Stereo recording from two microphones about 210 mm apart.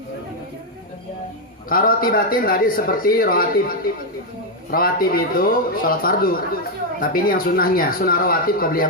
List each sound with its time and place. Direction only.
1.7 s speech: 45° left (ahead or behind)